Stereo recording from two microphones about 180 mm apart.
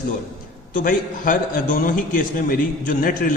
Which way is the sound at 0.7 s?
45° left (ahead or behind).